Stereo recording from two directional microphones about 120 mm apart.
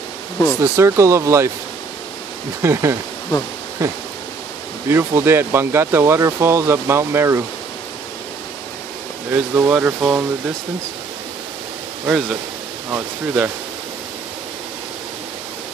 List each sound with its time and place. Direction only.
0.6 s speech: 25° right (ahead or behind)
2.6 s speech: 25° right (ahead or behind)
9.3 s speech: 20° right (ahead or behind)
12.1 s speech: 5° right (ahead or behind)